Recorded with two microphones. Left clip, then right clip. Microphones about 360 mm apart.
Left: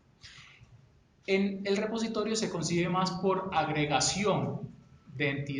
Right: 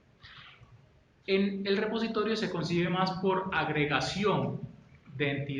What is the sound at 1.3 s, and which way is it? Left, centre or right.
A man's voice, centre.